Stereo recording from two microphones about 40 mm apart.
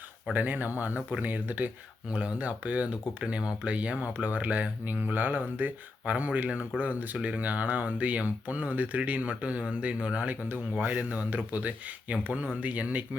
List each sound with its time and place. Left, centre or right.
0.3 s speech: right
2.0 s speech: right
3.2 s speech: right